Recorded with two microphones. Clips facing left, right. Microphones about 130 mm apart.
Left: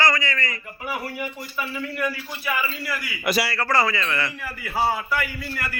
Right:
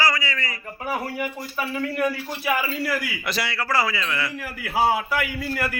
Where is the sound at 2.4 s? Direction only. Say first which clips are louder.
Right 3 dB; 60° right (ahead or behind).